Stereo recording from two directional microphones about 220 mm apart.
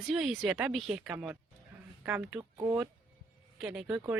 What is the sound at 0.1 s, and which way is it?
Speech, centre (ahead or behind).